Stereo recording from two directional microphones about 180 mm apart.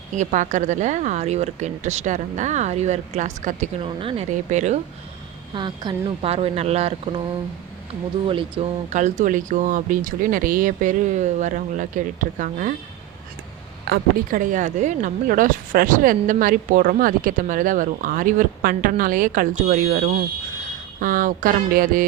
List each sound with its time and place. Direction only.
0.1 s speech: 40° right (ahead or behind)
3.8 s speech: 30° right (ahead or behind)
4.3 s speech: 40° right (ahead or behind)
5.5 s speech: 25° right (ahead or behind)
8.3 s speech: 30° right (ahead or behind)
9.0 s speech: 40° right (ahead or behind)
13.8 s speech: 55° right (ahead or behind)